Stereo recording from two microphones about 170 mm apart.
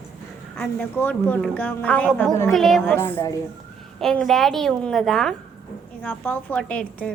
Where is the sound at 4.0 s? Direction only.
Centre (ahead or behind).